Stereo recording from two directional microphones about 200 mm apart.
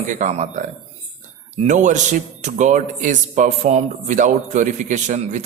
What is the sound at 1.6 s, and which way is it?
Speech, 40° right (ahead or behind).